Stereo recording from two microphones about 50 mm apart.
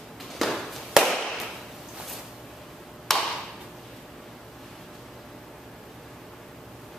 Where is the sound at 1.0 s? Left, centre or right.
Centre.